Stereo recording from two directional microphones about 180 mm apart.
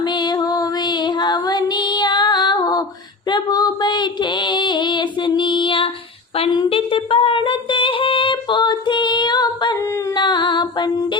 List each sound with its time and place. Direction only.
0.0 s music: 25° left (ahead or behind)
3.2 s female singing: 25° left (ahead or behind)
6.3 s a sound: 30° left (ahead or behind)